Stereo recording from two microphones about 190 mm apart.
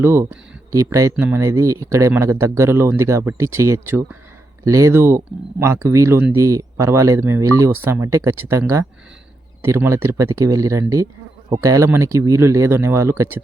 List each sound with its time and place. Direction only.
0.0 s speech: 15° right (ahead or behind)